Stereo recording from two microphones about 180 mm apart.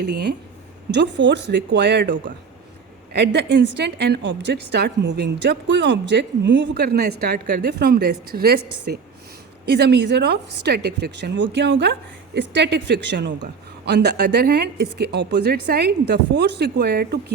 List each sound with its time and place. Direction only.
0.1 s a woman's voice: 65° right (ahead or behind)
0.9 s a woman's voice: 80° right
3.1 s a woman's voice: 70° right (ahead or behind)